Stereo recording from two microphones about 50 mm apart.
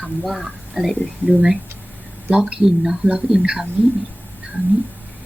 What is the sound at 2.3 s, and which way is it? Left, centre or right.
Speech, right.